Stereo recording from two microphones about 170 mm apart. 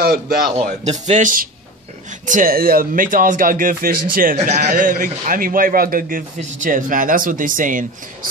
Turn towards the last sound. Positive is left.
turn(degrees=-50)  # may be behind; listen again after turning